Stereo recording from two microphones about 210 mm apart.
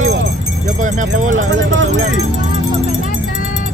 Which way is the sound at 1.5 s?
60° right (ahead or behind).